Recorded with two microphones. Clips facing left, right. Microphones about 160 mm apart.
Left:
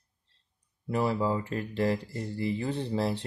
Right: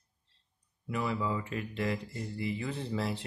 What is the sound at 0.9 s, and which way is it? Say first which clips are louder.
Speech: left 5 dB; 35° left (ahead or behind).